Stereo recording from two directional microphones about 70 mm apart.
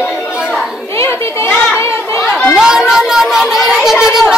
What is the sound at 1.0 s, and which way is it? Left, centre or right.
Speech, left.